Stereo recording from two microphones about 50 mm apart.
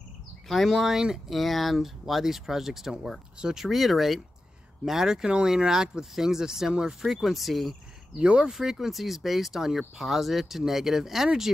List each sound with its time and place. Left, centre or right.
0.5 s speech: centre
8.2 s speech: centre
8.5 s speech: centre